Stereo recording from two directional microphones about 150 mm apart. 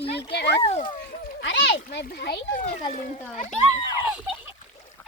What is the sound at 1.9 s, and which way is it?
Speech, 90° left.